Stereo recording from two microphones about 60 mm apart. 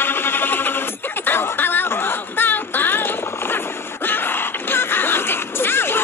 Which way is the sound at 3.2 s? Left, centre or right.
Left.